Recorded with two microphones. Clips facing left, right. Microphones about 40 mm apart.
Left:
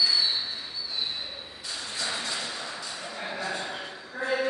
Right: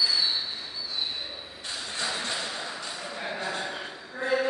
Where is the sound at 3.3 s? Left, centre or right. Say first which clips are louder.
Left 1 dB; right.